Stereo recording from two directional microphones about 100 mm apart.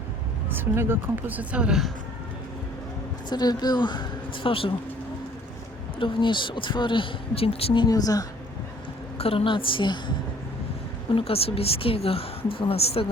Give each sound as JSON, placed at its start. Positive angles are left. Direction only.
{"t": 0.4, "sound": "speech", "side_deg": -20}
{"t": 3.2, "sound": "a woman's voice", "side_deg": 45}
{"t": 4.4, "sound": "speech", "side_deg": 65}
{"t": 6.0, "sound": "speech", "side_deg": 55}
{"t": 7.9, "sound": "a woman's voice", "side_deg": 40}
{"t": 9.1, "sound": "speech", "side_deg": 75}
{"t": 11.1, "sound": "a woman's voice", "side_deg": 75}